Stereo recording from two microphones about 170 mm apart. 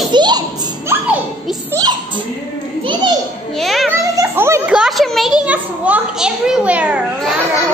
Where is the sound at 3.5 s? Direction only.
Centre (ahead or behind).